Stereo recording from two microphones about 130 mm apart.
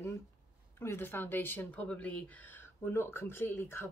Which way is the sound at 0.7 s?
20° left (ahead or behind).